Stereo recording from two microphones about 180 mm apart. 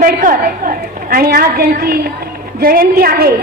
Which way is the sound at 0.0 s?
50° right (ahead or behind).